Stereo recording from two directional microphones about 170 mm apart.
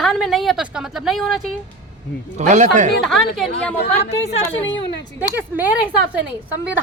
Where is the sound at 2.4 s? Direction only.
45° right (ahead or behind).